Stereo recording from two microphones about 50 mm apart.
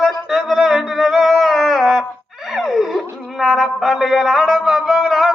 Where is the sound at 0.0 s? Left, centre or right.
Centre.